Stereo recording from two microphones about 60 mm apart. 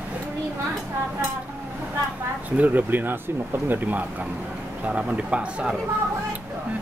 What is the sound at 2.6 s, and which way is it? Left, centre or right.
A man's voice, right.